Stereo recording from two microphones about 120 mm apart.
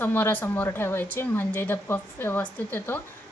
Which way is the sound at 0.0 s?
15° left (ahead or behind).